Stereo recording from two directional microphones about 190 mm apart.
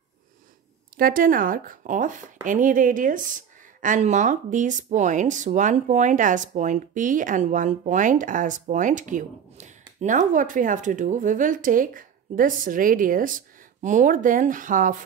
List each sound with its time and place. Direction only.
0.9 s speech: 50° right (ahead or behind)